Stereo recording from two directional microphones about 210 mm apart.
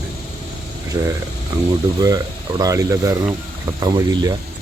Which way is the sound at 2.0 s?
15° right (ahead or behind).